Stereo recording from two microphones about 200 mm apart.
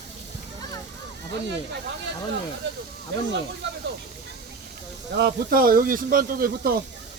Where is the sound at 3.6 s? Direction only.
60° right (ahead or behind).